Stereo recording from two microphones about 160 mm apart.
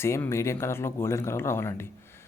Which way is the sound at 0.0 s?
15° left (ahead or behind).